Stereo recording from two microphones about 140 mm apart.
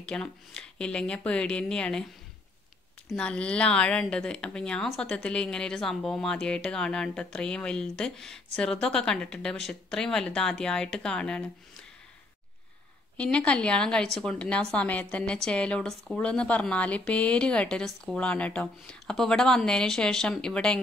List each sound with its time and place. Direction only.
0.0 s a woman's voice: 5° left (ahead or behind)
3.2 s a woman's voice: 10° left (ahead or behind)
13.2 s a woman's voice: 10° left (ahead or behind)